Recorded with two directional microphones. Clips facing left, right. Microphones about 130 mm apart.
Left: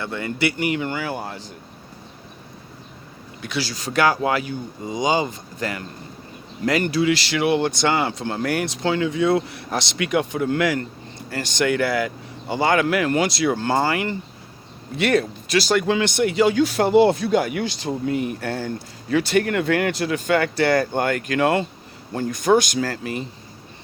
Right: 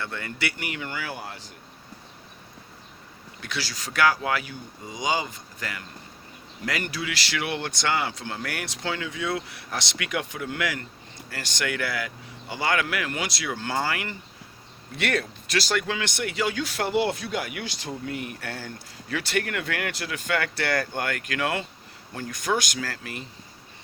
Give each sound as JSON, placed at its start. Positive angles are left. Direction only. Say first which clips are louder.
{"t": 0.0, "sound": "speech", "louder": "left 8 dB", "side_deg": 20}
{"t": 3.4, "sound": "speech", "louder": "left 7 dB", "side_deg": 15}
{"t": 7.9, "sound": "speech", "louder": "left 6 dB", "side_deg": 30}
{"t": 11.3, "sound": "speech", "louder": "left 9 dB", "side_deg": 25}
{"t": 14.9, "sound": "speech", "louder": "left 8 dB", "side_deg": 15}
{"t": 15.8, "sound": "speech", "louder": "left 10 dB", "side_deg": 25}